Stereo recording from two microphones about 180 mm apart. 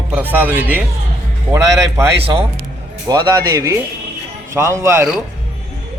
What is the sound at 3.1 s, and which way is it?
A man's voice, 20° right (ahead or behind).